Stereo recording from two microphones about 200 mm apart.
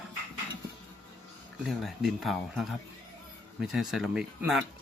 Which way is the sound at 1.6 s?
Centre (ahead or behind).